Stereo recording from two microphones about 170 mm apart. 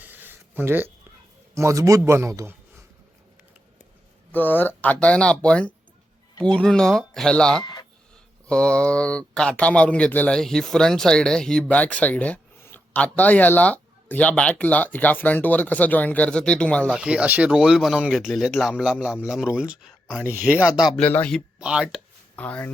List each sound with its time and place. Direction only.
0.0 s a sound: 10° right (ahead or behind)
1.5 s a man's voice: 15° right (ahead or behind)
4.3 s speech: 10° left (ahead or behind)
7.6 s a sound: 25° left (ahead or behind)
8.4 s speech: 5° left (ahead or behind)
16.9 s speech: 5° right (ahead or behind)
21.6 s speech: 5° right (ahead or behind)
22.4 s speech: 10° left (ahead or behind)